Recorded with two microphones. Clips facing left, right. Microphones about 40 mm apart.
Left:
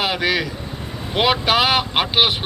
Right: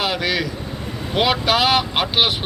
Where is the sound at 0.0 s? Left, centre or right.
Left.